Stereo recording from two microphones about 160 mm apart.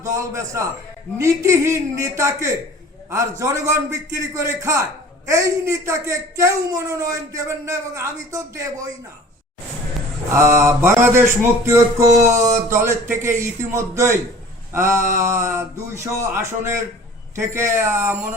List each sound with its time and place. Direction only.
0.0 s a man's voice: 20° right (ahead or behind)
10.3 s speech: 15° right (ahead or behind)
15.0 s a sound: 50° right (ahead or behind)
15.4 s speech: 15° right (ahead or behind)